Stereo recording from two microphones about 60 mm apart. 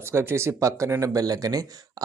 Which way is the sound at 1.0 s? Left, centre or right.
Right.